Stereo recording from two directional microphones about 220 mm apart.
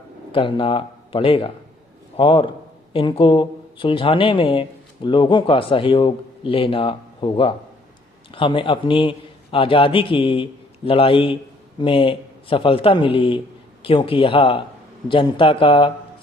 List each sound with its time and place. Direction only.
0.3 s a man's voice: 25° left (ahead or behind)